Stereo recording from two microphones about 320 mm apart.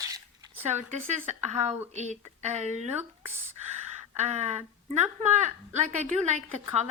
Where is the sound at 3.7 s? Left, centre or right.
Right.